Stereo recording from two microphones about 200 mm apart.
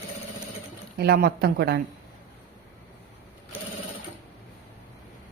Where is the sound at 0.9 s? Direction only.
50° right (ahead or behind).